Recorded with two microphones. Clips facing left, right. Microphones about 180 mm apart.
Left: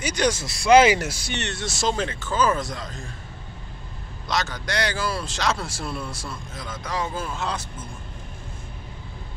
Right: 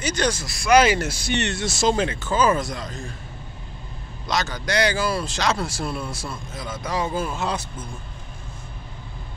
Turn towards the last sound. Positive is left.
turn(degrees=-10)  # may be behind; listen again after turning